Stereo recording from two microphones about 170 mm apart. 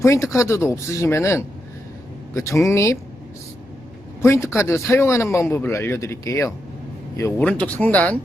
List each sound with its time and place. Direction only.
0.0 s a man's voice: 15° left (ahead or behind)
4.2 s a man's voice: 15° left (ahead or behind)